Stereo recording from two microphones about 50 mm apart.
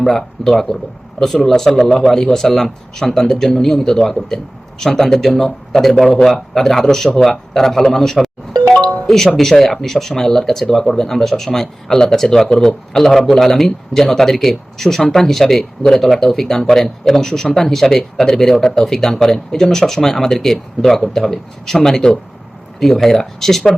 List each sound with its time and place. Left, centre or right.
0.0 s speech: centre
8.6 s music: centre
9.0 s speech: centre